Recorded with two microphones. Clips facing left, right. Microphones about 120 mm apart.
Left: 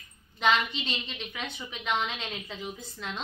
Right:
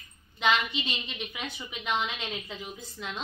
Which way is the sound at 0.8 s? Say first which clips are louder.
Right 1 dB; 10° right (ahead or behind).